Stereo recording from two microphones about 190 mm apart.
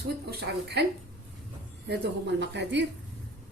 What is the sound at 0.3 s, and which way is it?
Speech, 60° right (ahead or behind).